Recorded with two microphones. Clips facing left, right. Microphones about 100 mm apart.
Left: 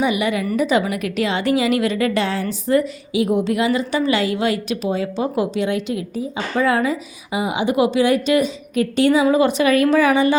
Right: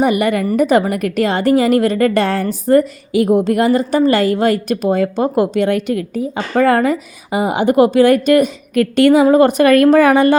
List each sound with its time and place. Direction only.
0.0 s a woman's voice: 50° right (ahead or behind)
9.2 s a woman's voice: 50° right (ahead or behind)